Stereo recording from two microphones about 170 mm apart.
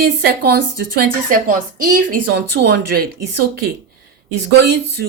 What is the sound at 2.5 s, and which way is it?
A woman's voice, 70° right (ahead or behind).